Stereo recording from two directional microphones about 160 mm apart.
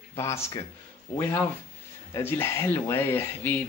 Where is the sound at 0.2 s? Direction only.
15° left (ahead or behind).